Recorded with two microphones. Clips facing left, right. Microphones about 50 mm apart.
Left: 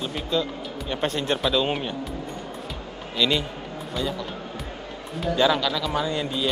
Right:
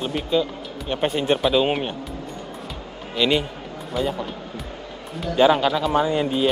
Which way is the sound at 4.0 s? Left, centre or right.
Centre.